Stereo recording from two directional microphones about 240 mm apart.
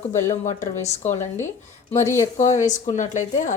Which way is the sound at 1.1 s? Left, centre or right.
Centre.